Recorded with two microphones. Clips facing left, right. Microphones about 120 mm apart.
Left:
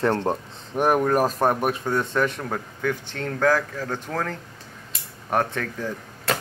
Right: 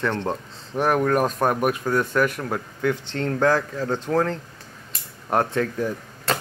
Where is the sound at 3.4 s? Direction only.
15° right (ahead or behind).